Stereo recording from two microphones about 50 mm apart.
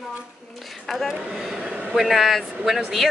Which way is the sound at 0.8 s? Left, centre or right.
Centre.